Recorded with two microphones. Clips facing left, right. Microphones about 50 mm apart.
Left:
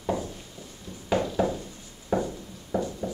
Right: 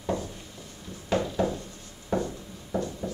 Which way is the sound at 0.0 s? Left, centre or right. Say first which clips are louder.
Left 1 dB; centre.